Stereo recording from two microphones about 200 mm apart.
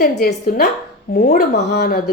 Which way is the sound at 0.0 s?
50° left (ahead or behind).